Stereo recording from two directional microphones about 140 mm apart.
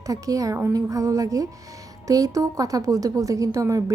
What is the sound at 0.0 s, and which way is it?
A woman's voice, 25° right (ahead or behind).